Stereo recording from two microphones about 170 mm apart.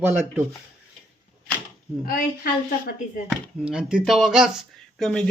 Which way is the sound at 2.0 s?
55° left (ahead or behind).